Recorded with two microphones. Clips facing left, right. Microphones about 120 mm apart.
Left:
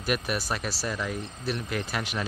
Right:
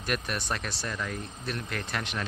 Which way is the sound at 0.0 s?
5° left (ahead or behind).